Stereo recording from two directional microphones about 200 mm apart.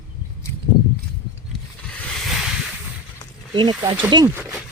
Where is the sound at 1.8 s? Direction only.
Centre (ahead or behind).